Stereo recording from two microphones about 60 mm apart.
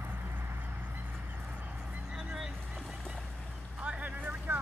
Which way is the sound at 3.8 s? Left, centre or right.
Right.